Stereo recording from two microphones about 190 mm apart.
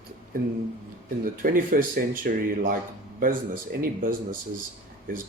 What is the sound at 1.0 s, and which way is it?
Speech, 50° right (ahead or behind).